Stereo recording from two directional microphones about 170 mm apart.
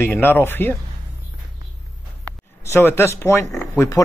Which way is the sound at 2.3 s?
15° left (ahead or behind).